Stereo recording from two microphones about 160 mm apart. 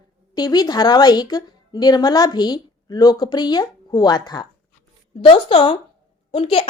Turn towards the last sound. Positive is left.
turn(degrees=35)  # may be behind; listen again after turning